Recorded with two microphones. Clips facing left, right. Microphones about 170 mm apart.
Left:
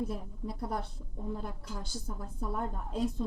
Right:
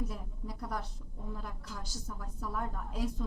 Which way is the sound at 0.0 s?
25° left (ahead or behind).